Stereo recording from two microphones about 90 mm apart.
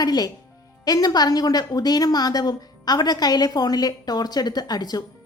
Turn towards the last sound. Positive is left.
turn(degrees=50)  # may be behind; listen again after turning